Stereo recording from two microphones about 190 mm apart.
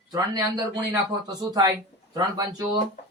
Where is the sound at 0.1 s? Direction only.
20° right (ahead or behind).